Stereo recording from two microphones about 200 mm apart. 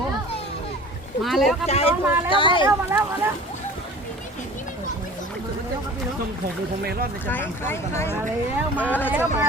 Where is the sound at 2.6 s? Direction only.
20° right (ahead or behind).